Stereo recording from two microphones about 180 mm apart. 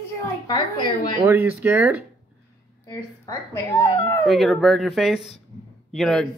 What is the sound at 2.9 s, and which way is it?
Speech, 15° left (ahead or behind).